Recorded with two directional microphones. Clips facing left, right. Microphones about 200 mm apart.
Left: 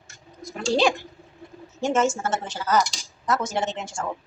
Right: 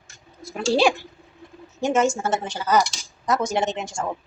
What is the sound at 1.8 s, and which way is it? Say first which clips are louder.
Speech: right 2 dB; 15° right (ahead or behind).